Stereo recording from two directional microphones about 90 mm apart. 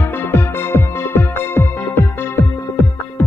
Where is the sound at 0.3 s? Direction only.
25° left (ahead or behind).